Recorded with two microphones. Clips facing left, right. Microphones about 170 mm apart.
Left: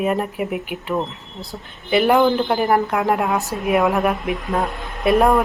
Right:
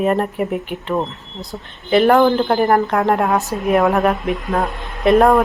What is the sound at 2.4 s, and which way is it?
Speech, centre (ahead or behind).